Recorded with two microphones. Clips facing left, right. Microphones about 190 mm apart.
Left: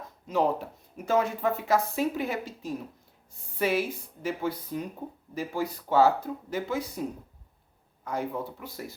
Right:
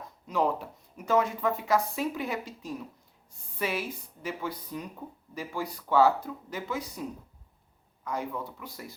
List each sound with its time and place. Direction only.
0.3 s speech: 25° left (ahead or behind)